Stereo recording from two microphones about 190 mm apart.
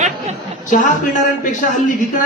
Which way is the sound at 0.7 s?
45° left (ahead or behind).